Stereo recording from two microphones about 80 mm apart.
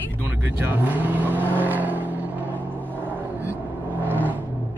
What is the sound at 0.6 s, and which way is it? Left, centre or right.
Speech, right.